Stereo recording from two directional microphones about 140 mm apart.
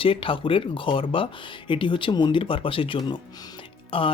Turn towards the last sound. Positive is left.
turn(degrees=40)  # may be behind; listen again after turning